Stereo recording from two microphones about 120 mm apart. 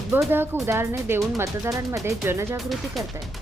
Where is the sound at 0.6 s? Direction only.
20° right (ahead or behind).